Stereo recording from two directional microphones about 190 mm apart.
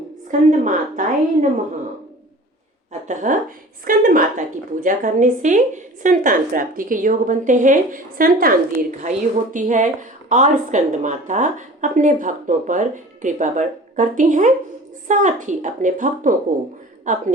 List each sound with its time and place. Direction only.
0.3 s a woman's voice: 40° right (ahead or behind)
3.1 s a woman's voice: 40° right (ahead or behind)